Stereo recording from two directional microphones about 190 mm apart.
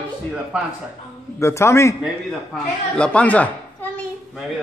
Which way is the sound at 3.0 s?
5° left (ahead or behind).